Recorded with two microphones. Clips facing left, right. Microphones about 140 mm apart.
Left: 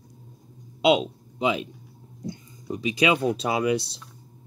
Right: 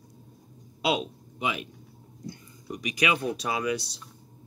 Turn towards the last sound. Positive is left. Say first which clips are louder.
# left 5 dB
turn(degrees=30)  # may be behind; listen again after turning